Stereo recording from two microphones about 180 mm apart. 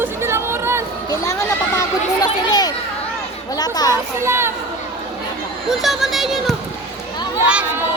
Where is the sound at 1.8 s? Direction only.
20° left (ahead or behind).